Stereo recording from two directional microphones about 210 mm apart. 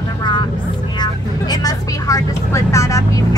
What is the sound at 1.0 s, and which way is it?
Speech, 20° left (ahead or behind).